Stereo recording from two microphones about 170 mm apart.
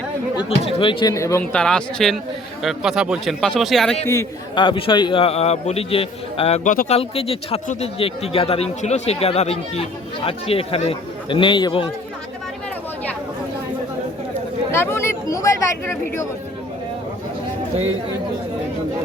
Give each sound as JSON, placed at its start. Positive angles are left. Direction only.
{"t": 0.3, "sound": "a man's voice", "side_deg": 35}
{"t": 1.1, "sound": "speech", "side_deg": 15}
{"t": 1.5, "sound": "speech", "side_deg": 5}
{"t": 4.0, "sound": "a man's voice", "side_deg": 15}
{"t": 6.7, "sound": "speech", "side_deg": 50}
{"t": 6.9, "sound": "a man's voice", "side_deg": 35}
{"t": 14.7, "sound": "speech", "side_deg": 15}